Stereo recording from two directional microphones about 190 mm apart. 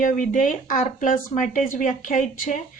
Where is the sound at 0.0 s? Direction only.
45° left (ahead or behind).